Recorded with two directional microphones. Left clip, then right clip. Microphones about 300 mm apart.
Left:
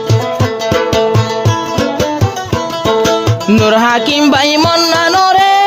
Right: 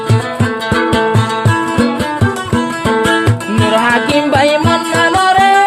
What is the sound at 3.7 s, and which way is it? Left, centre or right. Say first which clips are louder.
Music: even; left.